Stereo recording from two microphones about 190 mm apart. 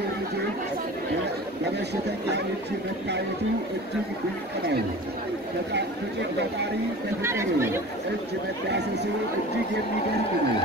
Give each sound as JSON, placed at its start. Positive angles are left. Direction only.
{"t": 7.2, "sound": "speech", "side_deg": -15}
{"t": 8.6, "sound": "speech", "side_deg": -60}